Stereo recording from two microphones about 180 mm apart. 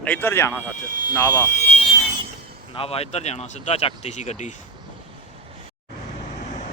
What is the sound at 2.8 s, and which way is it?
Speech, 35° left (ahead or behind).